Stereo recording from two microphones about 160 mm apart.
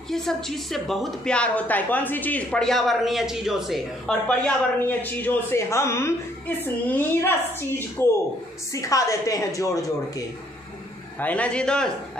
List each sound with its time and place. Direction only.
0.1 s a woman's voice: 5° left (ahead or behind); by 10.2 s 20° left (ahead or behind)
11.1 s a woman's voice: 10° left (ahead or behind)